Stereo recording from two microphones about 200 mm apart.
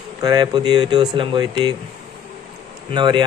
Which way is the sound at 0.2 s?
20° right (ahead or behind).